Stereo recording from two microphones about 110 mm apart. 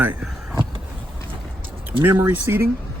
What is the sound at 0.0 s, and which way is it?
Speech, 15° right (ahead or behind).